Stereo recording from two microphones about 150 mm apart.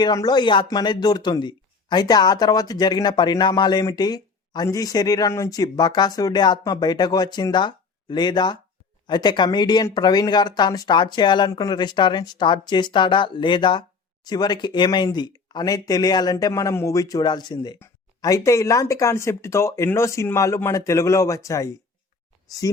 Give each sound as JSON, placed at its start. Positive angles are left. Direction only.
{"t": 0.0, "sound": "speech", "side_deg": 25}